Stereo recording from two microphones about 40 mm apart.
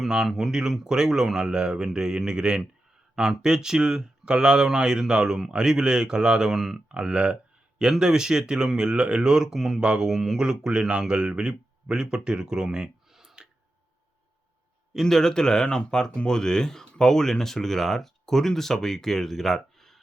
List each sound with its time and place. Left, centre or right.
0.3 s speech: centre
6.8 s speech: right
15.0 s speech: centre